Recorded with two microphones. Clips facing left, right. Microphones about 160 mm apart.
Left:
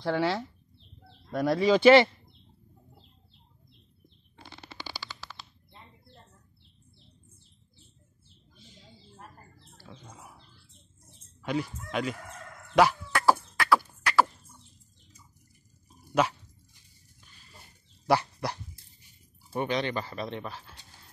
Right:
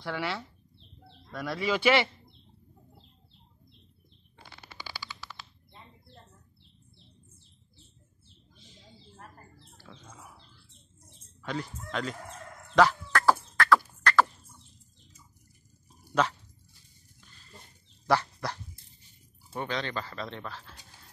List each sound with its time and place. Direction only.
0.0 s speech: 35° left (ahead or behind)
1.4 s speech: 35° left (ahead or behind)
9.8 s bird: 15° left (ahead or behind)
11.4 s speech: 10° left (ahead or behind)
12.7 s bird: 10° left (ahead or behind)
14.0 s a sound: 10° left (ahead or behind)
16.2 s dog: 10° left (ahead or behind)
18.0 s dog: 15° left (ahead or behind)
19.0 s speech: 15° left (ahead or behind)